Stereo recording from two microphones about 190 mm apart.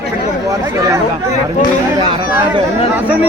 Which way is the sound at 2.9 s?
10° right (ahead or behind).